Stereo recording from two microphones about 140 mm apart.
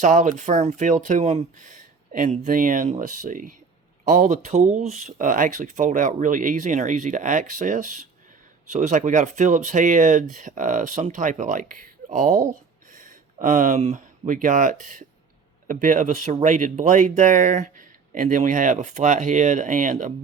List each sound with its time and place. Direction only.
0.0 s speech: 60° right (ahead or behind)